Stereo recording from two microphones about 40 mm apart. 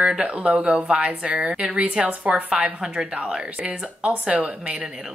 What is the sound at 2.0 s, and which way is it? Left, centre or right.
Speech, right.